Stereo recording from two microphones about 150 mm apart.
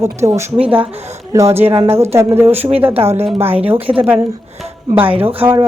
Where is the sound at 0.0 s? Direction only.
20° right (ahead or behind).